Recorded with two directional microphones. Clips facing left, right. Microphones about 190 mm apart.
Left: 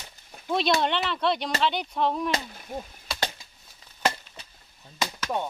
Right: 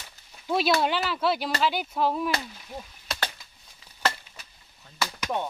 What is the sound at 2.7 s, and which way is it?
Speech, 50° left (ahead or behind).